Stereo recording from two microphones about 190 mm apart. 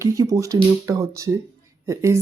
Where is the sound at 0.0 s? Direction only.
15° right (ahead or behind).